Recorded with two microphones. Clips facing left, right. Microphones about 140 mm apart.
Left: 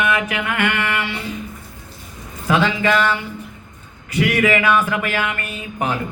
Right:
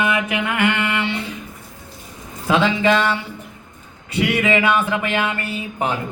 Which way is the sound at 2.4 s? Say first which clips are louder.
Right 1 dB; 20° right (ahead or behind).